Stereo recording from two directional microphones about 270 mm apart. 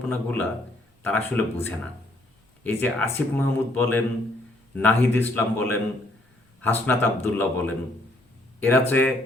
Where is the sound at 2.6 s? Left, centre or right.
Centre.